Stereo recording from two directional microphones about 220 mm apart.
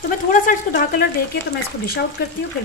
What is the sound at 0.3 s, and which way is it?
Speech, 40° left (ahead or behind).